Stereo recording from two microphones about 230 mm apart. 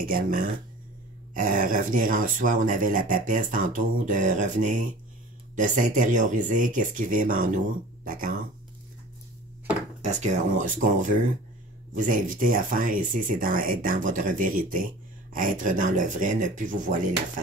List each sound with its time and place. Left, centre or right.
0.0 s speech: right
10.0 s speech: right